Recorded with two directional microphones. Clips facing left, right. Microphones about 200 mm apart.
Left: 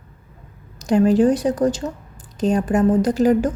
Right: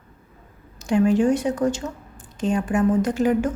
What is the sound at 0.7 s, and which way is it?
A woman's voice, 40° left (ahead or behind).